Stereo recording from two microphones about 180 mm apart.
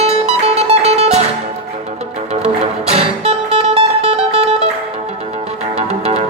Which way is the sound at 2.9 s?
35° right (ahead or behind).